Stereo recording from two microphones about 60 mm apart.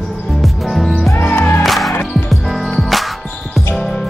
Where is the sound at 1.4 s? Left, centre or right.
Left.